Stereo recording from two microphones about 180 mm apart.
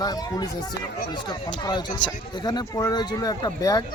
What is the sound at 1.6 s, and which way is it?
Speech, 25° left (ahead or behind).